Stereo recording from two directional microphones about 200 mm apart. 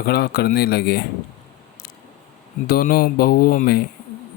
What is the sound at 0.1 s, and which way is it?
Speech, 50° left (ahead or behind).